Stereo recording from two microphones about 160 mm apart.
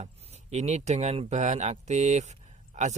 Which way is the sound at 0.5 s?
45° right (ahead or behind).